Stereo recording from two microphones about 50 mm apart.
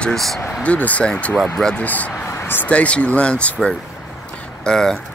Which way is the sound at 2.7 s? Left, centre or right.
Left.